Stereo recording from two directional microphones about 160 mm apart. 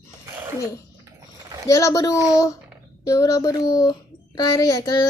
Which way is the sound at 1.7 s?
20° left (ahead or behind).